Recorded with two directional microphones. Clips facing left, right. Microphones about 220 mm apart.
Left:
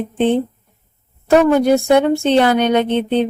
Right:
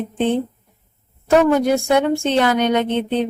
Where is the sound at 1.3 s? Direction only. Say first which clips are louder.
Left 3 dB; 35° left (ahead or behind).